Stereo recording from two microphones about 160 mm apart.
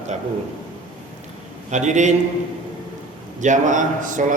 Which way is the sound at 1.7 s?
45° right (ahead or behind).